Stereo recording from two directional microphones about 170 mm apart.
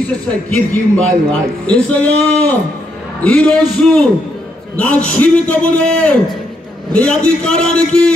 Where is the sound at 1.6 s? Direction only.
10° left (ahead or behind).